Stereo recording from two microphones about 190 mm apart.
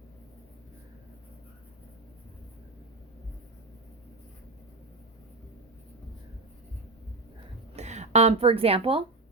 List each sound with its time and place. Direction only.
7.8 s speech: 35° right (ahead or behind)